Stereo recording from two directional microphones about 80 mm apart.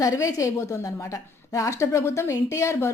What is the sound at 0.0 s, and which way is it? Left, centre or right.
A woman's voice, left.